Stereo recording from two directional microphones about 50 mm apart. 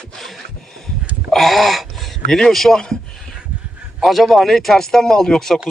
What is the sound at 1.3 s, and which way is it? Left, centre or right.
Speech, centre.